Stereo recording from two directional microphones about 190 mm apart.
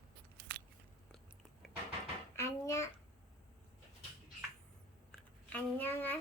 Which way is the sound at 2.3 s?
15° left (ahead or behind).